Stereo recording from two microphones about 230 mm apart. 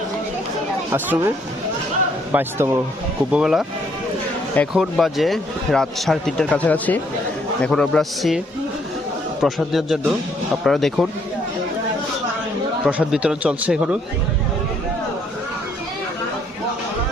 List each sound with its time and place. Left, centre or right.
0.9 s speech: centre
2.3 s speech: centre
9.4 s speech: centre
12.8 s speech: centre